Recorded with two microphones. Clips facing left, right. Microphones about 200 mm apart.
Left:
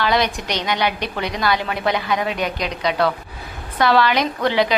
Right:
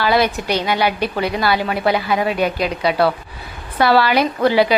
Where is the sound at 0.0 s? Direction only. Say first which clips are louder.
Right 3 dB; 5° right (ahead or behind).